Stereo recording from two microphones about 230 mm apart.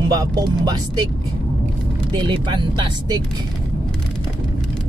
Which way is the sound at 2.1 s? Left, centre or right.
Centre.